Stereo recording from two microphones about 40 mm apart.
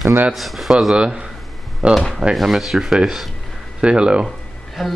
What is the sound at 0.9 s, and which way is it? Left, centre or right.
Speech, right.